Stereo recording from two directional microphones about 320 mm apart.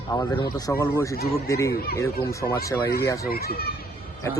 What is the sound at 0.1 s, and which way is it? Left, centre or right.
Speech, centre.